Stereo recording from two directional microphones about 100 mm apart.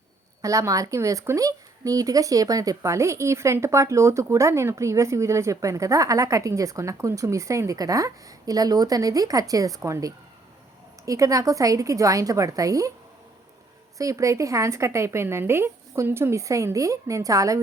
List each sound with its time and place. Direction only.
0.4 s a woman's voice: 35° right (ahead or behind)
14.0 s a woman's voice: 35° right (ahead or behind)